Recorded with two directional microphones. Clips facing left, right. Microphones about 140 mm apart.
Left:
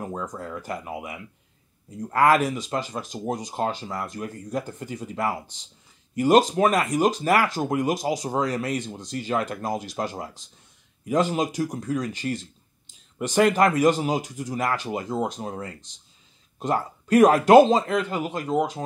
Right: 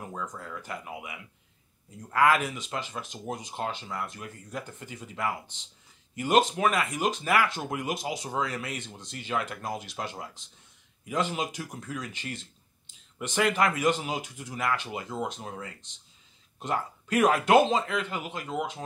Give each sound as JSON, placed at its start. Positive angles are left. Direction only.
{"t": 0.0, "sound": "speech", "side_deg": 40}